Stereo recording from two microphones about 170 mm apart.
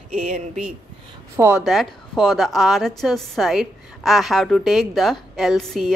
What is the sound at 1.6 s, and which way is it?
A woman's voice, centre (ahead or behind).